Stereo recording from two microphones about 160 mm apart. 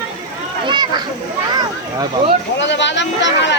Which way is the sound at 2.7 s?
90° left.